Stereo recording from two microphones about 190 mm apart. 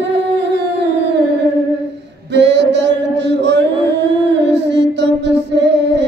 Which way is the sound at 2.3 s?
65° right (ahead or behind).